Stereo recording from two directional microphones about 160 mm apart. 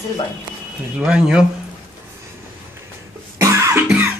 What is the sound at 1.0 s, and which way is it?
Speech, 5° right (ahead or behind).